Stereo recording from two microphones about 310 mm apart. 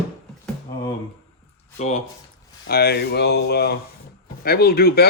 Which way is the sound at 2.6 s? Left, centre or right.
Left.